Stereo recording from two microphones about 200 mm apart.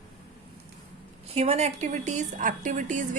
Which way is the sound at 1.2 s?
30° right (ahead or behind).